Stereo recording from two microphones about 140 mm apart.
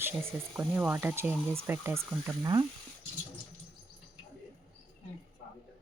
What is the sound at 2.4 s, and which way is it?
Speech, 30° right (ahead or behind).